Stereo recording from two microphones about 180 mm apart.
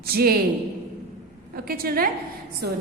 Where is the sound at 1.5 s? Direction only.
55° right (ahead or behind).